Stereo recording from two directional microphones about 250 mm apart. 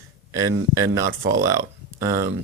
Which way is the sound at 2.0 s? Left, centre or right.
Centre.